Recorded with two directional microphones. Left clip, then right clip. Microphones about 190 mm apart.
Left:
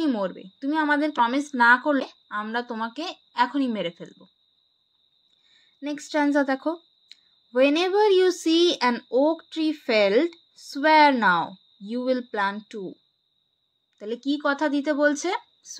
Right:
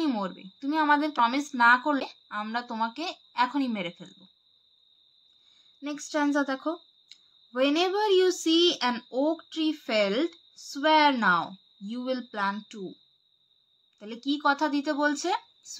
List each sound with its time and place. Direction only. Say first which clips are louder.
0.0 s a sound: left 4 dB; 15° left (ahead or behind)
0.6 s speech: left 1 dB; 20° left (ahead or behind)
5.8 s speech: left 4 dB; 25° left (ahead or behind)
13.9 s speech: left 4 dB; 25° left (ahead or behind)